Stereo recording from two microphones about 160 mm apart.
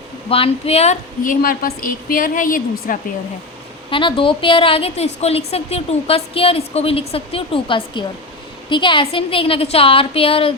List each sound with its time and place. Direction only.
0.3 s a woman's voice: 35° left (ahead or behind)
1.2 s a woman's voice: 60° left (ahead or behind)
3.8 s a woman's voice: 30° left (ahead or behind)